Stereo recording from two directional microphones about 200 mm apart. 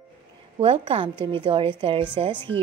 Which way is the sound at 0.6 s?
30° right (ahead or behind).